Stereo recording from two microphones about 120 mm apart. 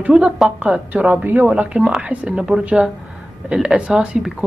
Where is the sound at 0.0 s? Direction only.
10° right (ahead or behind).